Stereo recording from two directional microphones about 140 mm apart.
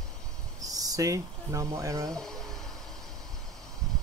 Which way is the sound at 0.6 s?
25° right (ahead or behind).